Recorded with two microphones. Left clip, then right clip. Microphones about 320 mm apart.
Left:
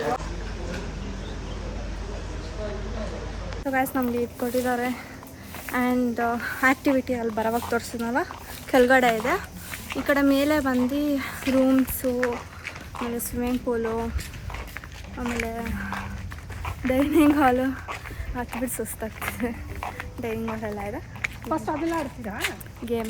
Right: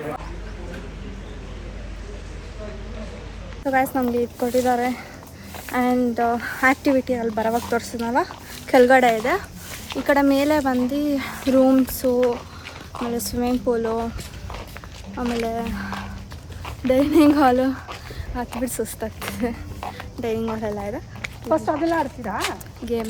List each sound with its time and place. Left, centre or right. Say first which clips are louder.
3.7 s speech: right 5 dB; centre
15.2 s speech: right 5 dB; centre
21.5 s speech: right 8 dB; right